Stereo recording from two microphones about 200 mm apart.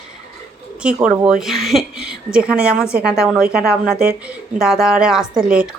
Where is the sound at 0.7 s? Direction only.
5° right (ahead or behind).